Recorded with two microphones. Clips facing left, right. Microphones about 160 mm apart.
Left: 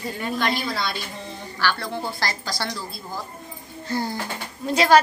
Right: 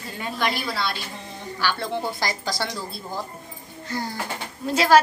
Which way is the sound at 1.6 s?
15° right (ahead or behind).